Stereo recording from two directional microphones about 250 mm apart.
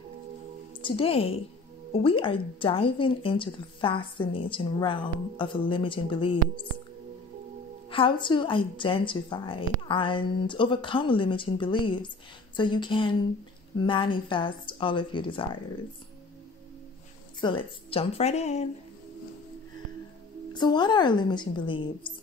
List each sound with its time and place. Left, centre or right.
0.8 s speech: left
7.9 s speech: centre
17.4 s speech: centre
20.5 s a woman's voice: centre